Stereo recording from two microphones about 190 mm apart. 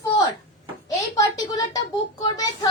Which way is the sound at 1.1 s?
20° left (ahead or behind).